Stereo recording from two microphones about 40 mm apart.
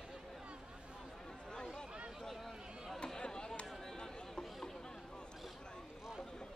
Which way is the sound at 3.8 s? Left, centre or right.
Centre.